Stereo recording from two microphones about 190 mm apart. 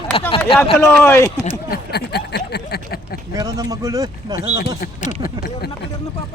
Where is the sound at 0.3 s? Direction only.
30° left (ahead or behind).